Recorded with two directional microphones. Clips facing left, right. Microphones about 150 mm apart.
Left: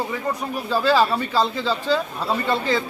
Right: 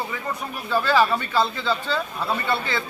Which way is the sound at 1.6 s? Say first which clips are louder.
Left 3 dB; 35° left (ahead or behind).